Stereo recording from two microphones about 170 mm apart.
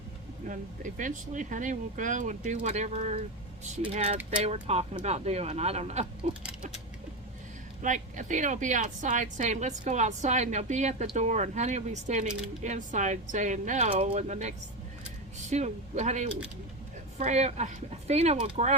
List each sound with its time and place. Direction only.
0.4 s a woman's voice: 50° right (ahead or behind)
4.4 s speech: 35° right (ahead or behind)
7.8 s a woman's voice: 50° right (ahead or behind)